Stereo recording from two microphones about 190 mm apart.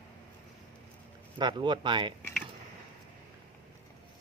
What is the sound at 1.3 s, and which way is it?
Speech, 25° right (ahead or behind).